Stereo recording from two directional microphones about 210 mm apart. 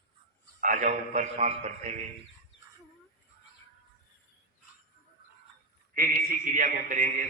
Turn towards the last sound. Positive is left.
turn(degrees=-40)  # may be behind; listen again after turning